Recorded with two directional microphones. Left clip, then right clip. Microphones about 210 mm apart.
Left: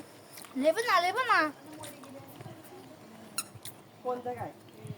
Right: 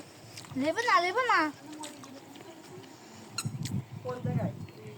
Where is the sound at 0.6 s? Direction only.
55° left (ahead or behind).